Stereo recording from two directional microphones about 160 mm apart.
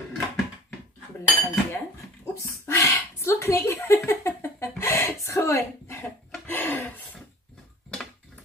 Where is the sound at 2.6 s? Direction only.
15° left (ahead or behind).